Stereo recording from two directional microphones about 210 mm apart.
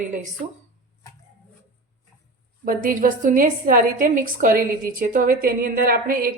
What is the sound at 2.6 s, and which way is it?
A woman's voice, 40° right (ahead or behind).